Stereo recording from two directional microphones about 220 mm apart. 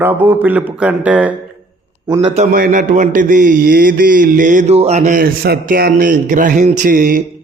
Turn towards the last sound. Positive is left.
turn(degrees=-40)  # may be behind; listen again after turning